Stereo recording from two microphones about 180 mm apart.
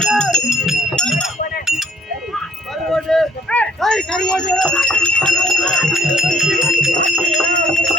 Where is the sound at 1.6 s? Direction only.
Centre (ahead or behind).